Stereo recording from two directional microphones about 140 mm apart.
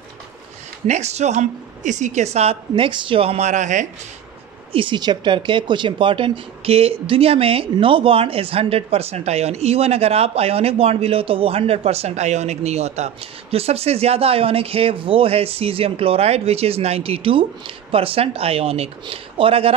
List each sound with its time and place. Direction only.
0.8 s speech: 55° right (ahead or behind)
4.7 s speech: 35° right (ahead or behind)